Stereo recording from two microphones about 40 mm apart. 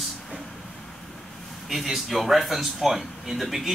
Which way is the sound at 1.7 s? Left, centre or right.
Centre.